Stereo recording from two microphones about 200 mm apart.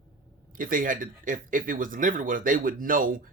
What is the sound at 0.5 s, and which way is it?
Speech, 45° right (ahead or behind).